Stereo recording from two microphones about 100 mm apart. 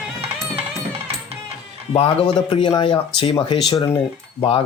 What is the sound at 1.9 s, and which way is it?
Speech, 65° left (ahead or behind).